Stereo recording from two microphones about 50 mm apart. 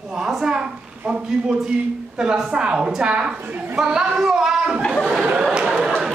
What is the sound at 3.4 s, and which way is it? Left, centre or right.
Speech, right.